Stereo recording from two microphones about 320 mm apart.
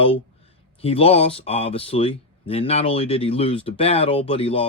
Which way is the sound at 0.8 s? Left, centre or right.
Centre.